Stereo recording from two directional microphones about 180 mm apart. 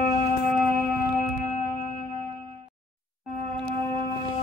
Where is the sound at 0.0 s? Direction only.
55° left (ahead or behind).